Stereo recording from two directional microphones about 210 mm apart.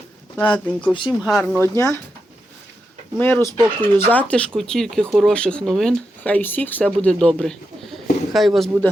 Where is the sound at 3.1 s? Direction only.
10° left (ahead or behind).